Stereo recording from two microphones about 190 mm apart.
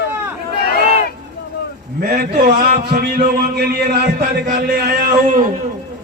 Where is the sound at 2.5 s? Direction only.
45° right (ahead or behind).